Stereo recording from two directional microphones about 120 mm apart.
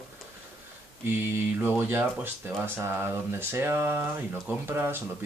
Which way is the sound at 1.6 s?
20° right (ahead or behind).